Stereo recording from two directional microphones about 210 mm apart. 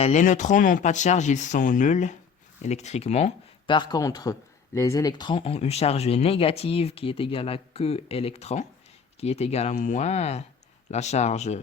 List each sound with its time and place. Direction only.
0.0 s speech: 35° left (ahead or behind)